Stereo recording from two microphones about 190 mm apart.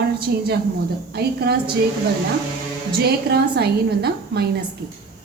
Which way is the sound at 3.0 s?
55° right (ahead or behind).